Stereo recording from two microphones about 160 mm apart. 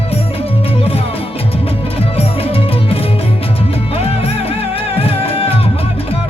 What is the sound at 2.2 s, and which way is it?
Music, 40° left (ahead or behind).